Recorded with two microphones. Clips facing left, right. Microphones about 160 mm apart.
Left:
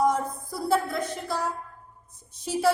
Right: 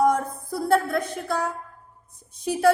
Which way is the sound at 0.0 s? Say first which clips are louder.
Right 3 dB; 60° right (ahead or behind).